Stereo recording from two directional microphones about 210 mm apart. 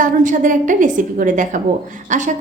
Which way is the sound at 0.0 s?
40° right (ahead or behind).